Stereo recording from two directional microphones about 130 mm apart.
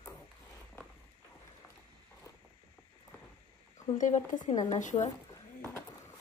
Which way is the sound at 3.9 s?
75° left (ahead or behind).